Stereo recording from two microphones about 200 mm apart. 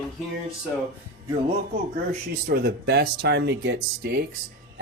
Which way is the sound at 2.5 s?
55° right (ahead or behind).